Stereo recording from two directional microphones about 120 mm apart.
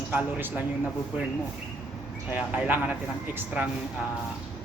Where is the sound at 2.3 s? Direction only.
10° right (ahead or behind).